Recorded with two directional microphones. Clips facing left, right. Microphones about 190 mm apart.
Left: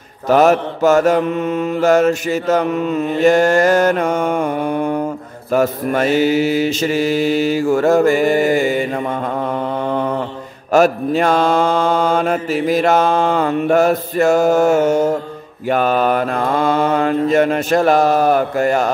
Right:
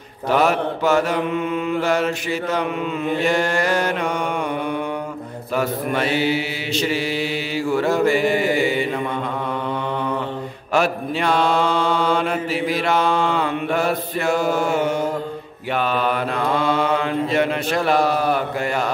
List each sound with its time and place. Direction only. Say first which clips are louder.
0.3 s mantra: left 6 dB; 45° left (ahead or behind)
9.8 s mantra: left 5 dB; 45° left (ahead or behind)